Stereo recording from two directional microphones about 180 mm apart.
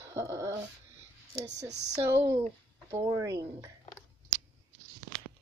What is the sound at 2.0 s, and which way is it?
Speech, 10° right (ahead or behind).